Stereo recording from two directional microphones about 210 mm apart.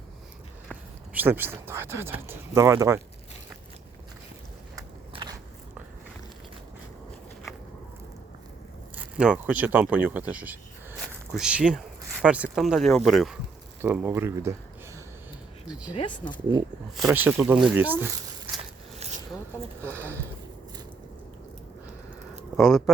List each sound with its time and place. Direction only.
0.7 s a sound: 10° right (ahead or behind)
1.6 s speech: 10° right (ahead or behind)
4.8 s biting: 20° right (ahead or behind)
9.0 s speech: 5° right (ahead or behind)
15.6 s speech: 5° right (ahead or behind)
16.0 s speech: 25° left (ahead or behind)
17.1 s speech: 10° right (ahead or behind)
18.0 s a sound: 10° right (ahead or behind)
18.9 s a sound: 30° right (ahead or behind)
19.8 s speech: 10° right (ahead or behind)
22.5 s speech: centre (ahead or behind)